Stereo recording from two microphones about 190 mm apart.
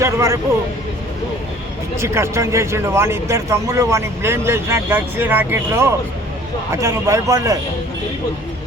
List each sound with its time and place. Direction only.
0.0 s speech: 15° right (ahead or behind)
2.0 s speech: 15° right (ahead or behind)